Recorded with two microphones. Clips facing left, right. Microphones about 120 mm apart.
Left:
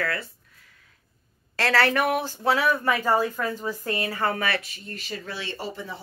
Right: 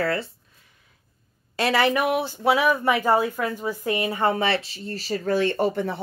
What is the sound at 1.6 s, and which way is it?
Speech, 15° right (ahead or behind).